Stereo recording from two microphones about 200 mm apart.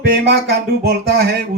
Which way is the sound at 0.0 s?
55° right (ahead or behind).